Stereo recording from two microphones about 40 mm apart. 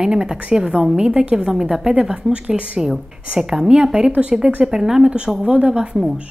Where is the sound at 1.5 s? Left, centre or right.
Centre.